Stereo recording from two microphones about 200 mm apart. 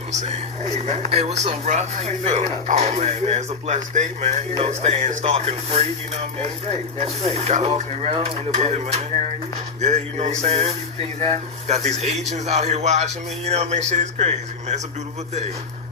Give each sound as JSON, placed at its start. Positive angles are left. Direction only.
{"t": 0.1, "sound": "speech", "side_deg": -35}
{"t": 7.3, "sound": "speech", "side_deg": -30}